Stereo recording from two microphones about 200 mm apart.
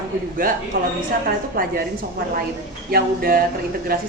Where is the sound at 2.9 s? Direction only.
50° right (ahead or behind).